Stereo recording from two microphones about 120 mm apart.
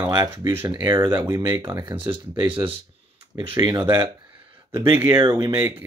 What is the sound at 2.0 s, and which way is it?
Speech, 40° right (ahead or behind).